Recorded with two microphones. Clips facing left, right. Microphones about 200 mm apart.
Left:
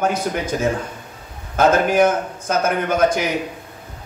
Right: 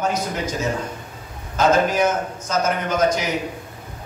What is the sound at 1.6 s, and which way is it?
A man's voice, 55° left (ahead or behind).